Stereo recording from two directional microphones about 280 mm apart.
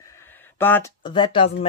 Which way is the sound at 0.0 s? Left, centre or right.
Centre.